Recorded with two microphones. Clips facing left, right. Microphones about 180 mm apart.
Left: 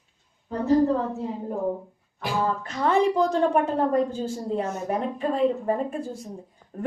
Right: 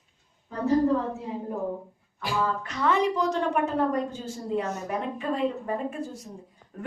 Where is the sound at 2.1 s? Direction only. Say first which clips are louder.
Left 2 dB; 35° left (ahead or behind).